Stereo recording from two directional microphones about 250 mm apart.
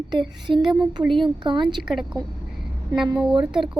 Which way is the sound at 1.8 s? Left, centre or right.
Centre.